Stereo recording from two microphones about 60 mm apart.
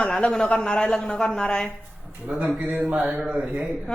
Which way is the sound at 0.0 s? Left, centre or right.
Centre.